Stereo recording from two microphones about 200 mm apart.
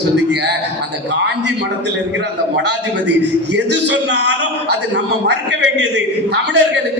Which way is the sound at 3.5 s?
60° right (ahead or behind).